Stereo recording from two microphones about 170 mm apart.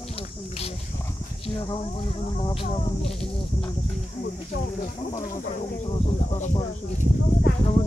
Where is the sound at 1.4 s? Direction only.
30° left (ahead or behind).